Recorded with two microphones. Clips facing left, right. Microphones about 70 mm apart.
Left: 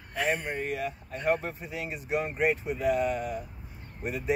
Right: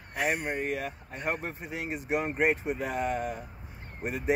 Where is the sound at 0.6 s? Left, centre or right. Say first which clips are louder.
Even; right.